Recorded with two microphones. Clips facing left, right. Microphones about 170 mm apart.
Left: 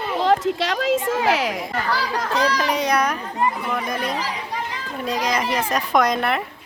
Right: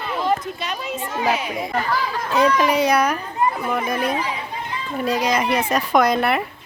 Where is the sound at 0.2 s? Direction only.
90° left.